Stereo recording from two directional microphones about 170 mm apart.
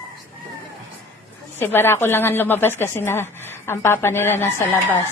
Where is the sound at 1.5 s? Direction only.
15° left (ahead or behind).